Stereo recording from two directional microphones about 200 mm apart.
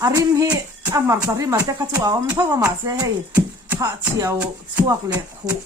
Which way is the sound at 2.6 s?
10° right (ahead or behind).